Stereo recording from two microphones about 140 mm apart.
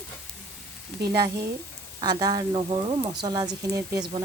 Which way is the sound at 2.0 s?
30° right (ahead or behind).